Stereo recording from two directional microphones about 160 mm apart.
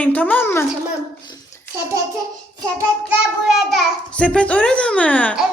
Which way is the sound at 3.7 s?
5° left (ahead or behind).